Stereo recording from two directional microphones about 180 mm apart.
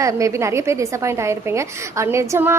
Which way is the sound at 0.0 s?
15° right (ahead or behind).